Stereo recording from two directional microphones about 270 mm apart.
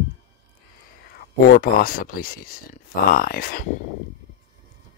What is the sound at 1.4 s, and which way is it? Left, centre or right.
Speech, left.